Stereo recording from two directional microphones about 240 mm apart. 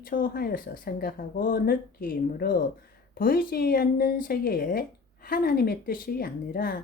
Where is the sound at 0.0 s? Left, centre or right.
Left.